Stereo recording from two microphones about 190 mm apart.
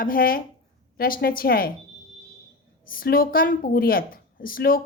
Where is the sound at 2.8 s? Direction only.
50° left (ahead or behind).